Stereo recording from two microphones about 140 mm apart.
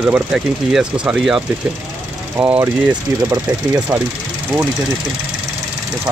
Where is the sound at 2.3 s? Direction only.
15° right (ahead or behind).